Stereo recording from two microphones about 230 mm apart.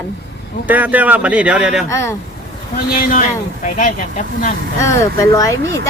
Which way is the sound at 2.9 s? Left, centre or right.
Left.